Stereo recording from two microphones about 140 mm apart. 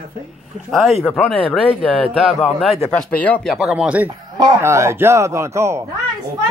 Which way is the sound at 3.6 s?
5° right (ahead or behind).